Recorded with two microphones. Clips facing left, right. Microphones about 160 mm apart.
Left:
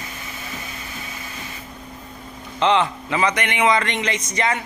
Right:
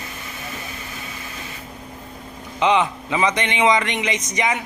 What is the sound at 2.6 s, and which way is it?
Speech, 15° right (ahead or behind).